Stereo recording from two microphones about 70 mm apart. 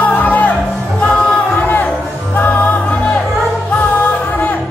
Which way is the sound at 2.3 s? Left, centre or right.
Left.